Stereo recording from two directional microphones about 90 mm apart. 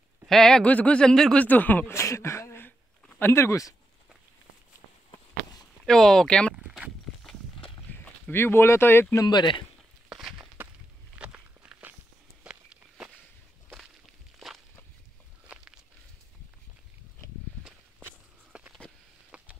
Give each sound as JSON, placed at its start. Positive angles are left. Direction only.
{"t": 0.3, "sound": "speech", "side_deg": 5}
{"t": 1.4, "sound": "speech", "side_deg": 20}
{"t": 5.1, "sound": "a sound", "side_deg": 45}
{"t": 5.9, "sound": "speech", "side_deg": 5}
{"t": 7.9, "sound": "speech", "side_deg": 25}
{"t": 9.1, "sound": "speech", "side_deg": 50}
{"t": 10.0, "sound": "walk", "side_deg": -5}
{"t": 11.1, "sound": "walk", "side_deg": -15}
{"t": 15.4, "sound": "walk", "side_deg": -15}
{"t": 18.5, "sound": "a sound", "side_deg": -10}